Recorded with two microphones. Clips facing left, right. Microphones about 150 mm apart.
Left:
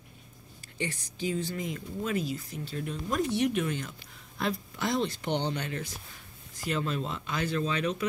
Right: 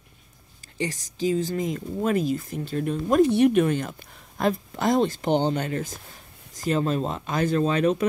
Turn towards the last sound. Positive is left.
turn(degrees=-45)  # may be behind; listen again after turning